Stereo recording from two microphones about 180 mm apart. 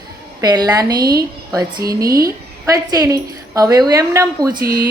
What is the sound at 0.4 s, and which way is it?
A woman's voice, 20° right (ahead or behind).